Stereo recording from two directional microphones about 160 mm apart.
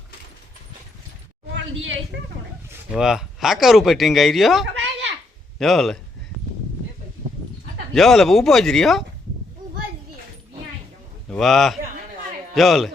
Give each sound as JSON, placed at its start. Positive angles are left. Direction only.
{"t": 2.9, "sound": "speech", "side_deg": -5}
{"t": 4.8, "sound": "a sound", "side_deg": -90}
{"t": 5.5, "sound": "speech", "side_deg": 0}
{"t": 7.9, "sound": "speech", "side_deg": 0}
{"t": 11.3, "sound": "speech", "side_deg": 0}